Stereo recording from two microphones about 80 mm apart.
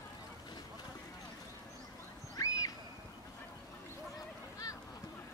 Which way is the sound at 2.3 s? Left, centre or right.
Left.